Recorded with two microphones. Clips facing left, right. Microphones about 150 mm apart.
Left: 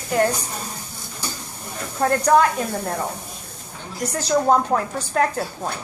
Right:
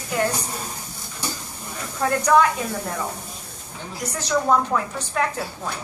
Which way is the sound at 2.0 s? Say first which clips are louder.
Left 1 dB; 45° left (ahead or behind).